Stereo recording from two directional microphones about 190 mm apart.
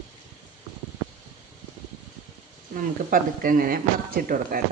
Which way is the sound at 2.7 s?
50° right (ahead or behind).